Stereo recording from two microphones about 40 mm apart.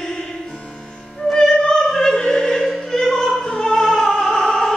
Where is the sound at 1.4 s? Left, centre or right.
Centre.